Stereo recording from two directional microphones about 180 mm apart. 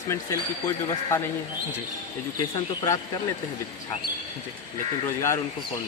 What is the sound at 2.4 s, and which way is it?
Speech, 20° left (ahead or behind).